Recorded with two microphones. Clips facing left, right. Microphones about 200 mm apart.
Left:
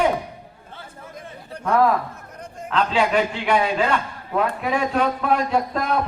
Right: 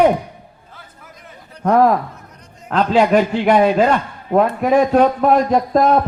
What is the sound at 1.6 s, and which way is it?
A man's voice, 40° right (ahead or behind).